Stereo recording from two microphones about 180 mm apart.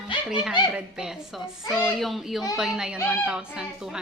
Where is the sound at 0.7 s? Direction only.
5° right (ahead or behind).